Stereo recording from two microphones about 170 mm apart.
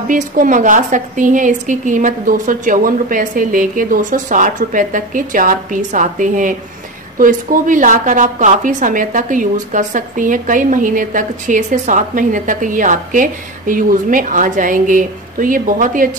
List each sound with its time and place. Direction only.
0.1 s a woman's voice: 50° right (ahead or behind)